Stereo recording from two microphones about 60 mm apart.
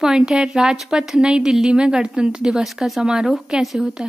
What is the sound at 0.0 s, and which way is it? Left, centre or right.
A woman's voice, centre.